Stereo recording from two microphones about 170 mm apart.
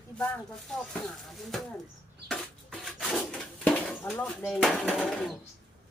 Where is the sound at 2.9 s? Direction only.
Centre (ahead or behind).